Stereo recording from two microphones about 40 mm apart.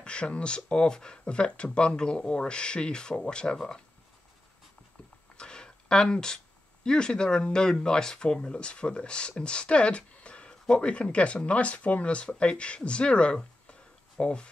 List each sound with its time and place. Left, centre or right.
0.0 s speech: left
5.4 s speech: left